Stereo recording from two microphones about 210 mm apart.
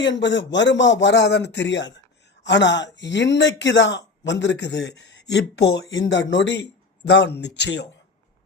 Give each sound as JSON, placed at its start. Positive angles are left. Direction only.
{"t": 0.0, "sound": "speech", "side_deg": 55}